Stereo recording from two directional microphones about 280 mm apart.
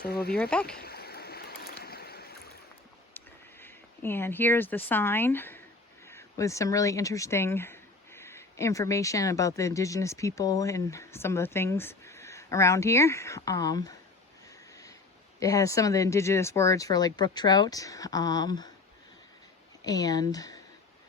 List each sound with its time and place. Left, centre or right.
0.0 s speech: left
0.3 s speech: centre
0.8 s stream: left
3.2 s speech: centre
15.4 s speech: centre
19.8 s speech: centre